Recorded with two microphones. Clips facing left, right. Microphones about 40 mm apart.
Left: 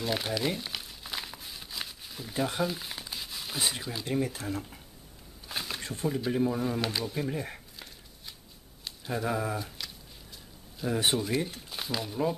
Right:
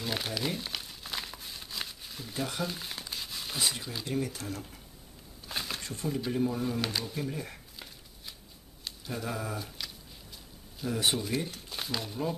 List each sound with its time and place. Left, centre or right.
0.0 s crumpling: centre
4.0 s speech: centre
5.5 s a sound: centre
5.8 s a sound: left
6.0 s speech: centre
7.2 s speech: centre
9.1 s speech: centre
9.6 s a sound: centre
10.8 s speech: centre